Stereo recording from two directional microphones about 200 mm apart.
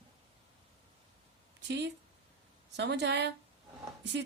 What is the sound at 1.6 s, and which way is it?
A woman's voice, 60° right (ahead or behind).